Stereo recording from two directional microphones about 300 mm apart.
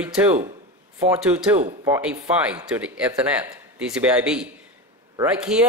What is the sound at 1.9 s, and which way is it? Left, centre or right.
Speech, centre.